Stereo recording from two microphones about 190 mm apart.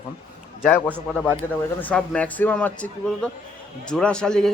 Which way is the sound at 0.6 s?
10° left (ahead or behind).